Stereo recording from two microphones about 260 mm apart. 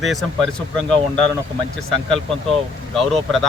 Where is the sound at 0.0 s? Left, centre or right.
Centre.